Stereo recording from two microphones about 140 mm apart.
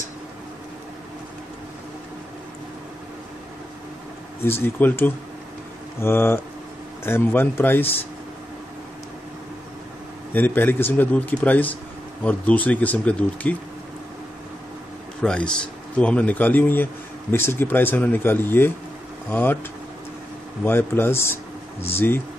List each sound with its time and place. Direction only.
4.5 s a man's voice: 15° left (ahead or behind)
10.3 s a man's voice: 15° left (ahead or behind)
15.2 s a man's voice: 5° left (ahead or behind)
20.6 s a man's voice: 15° left (ahead or behind)